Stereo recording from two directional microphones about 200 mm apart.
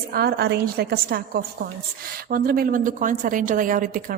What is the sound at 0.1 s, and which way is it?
A woman's voice, 50° right (ahead or behind).